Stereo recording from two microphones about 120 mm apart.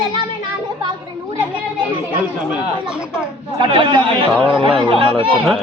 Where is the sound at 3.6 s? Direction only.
45° right (ahead or behind).